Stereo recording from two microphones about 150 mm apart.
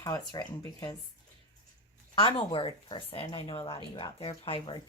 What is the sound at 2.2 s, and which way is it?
A woman's voice, 35° left (ahead or behind).